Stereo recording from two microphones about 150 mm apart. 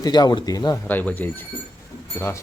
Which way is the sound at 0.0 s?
25° left (ahead or behind).